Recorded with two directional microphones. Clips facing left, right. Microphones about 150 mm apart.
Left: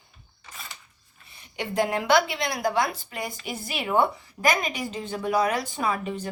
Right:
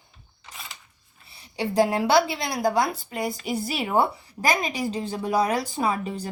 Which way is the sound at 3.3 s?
40° right (ahead or behind).